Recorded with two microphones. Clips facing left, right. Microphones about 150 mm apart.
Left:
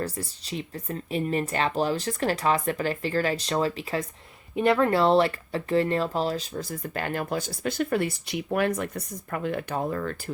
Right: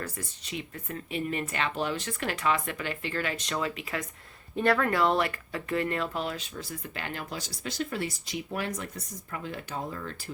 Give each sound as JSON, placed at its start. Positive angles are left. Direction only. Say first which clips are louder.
{"t": 0.0, "sound": "speech", "louder": "left 6 dB", "side_deg": 35}